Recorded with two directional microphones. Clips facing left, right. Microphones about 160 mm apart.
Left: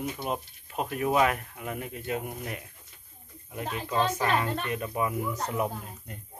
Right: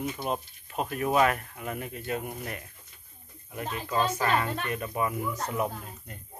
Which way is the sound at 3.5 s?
15° left (ahead or behind).